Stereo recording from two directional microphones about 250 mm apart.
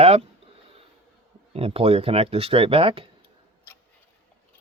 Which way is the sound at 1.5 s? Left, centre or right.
Right.